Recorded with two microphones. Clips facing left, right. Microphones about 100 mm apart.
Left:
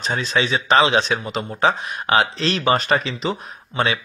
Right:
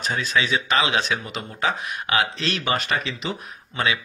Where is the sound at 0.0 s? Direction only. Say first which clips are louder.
Left 2 dB; 30° left (ahead or behind).